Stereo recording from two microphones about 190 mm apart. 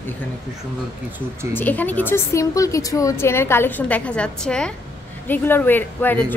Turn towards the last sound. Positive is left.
turn(degrees=10)  # may be behind; listen again after turning